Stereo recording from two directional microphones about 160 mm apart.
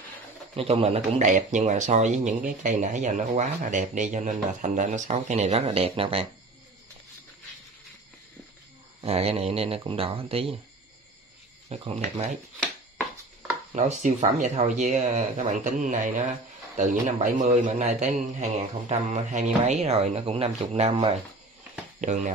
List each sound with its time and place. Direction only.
0.6 s speech: 40° right (ahead or behind)
9.0 s speech: 40° right (ahead or behind)
11.7 s speech: 40° right (ahead or behind)
13.7 s speech: 50° right (ahead or behind)